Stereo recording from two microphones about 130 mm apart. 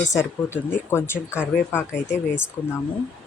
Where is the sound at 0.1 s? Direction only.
20° left (ahead or behind).